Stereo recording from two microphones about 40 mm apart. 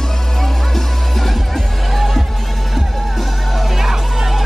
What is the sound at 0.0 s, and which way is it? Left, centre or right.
Music, centre.